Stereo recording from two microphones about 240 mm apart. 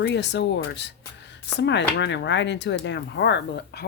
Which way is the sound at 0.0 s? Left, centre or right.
Left.